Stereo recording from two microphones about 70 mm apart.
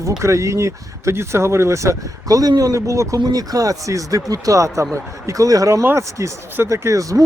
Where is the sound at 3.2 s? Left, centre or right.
Right.